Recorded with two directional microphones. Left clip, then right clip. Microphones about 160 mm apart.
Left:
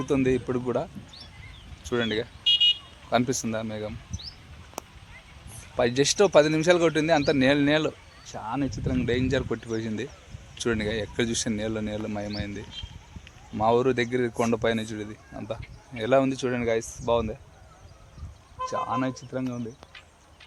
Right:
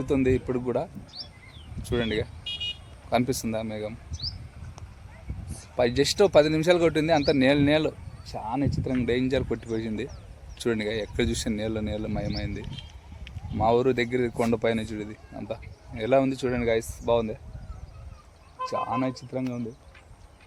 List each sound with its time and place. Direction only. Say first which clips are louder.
0.0 s speech: even; 10° left (ahead or behind)
2.4 s car alarm: left 12 dB; 60° right (ahead or behind)
3.1 s speech: left 1 dB; 10° left (ahead or behind)
5.7 s speech: even; 10° left (ahead or behind)
18.6 s speech: even; 35° left (ahead or behind)
19.3 s speech: even; 10° left (ahead or behind)